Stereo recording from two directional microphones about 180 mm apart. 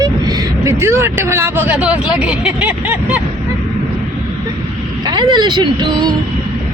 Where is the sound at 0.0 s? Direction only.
20° right (ahead or behind).